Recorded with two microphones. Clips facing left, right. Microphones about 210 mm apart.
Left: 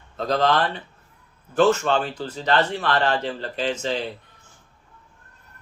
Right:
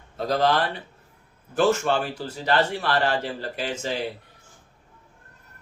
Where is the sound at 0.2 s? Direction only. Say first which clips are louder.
Left 1 dB; 10° right (ahead or behind).